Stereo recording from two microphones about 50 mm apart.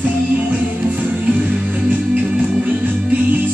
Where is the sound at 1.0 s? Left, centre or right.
Right.